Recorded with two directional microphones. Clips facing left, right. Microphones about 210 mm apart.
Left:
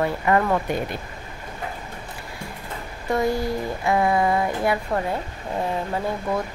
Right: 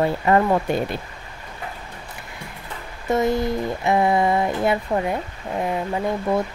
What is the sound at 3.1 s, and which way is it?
Speech, 20° right (ahead or behind).